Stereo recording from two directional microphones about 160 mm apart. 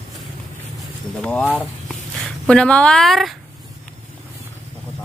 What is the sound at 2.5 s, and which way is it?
Speech, 5° left (ahead or behind).